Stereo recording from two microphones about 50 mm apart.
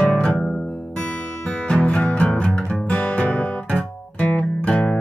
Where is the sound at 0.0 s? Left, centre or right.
Centre.